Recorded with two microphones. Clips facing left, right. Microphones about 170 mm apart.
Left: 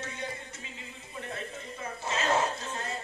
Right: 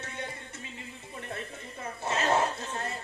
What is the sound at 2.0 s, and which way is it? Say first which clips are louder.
Speech: right 2 dB; 60° right (ahead or behind).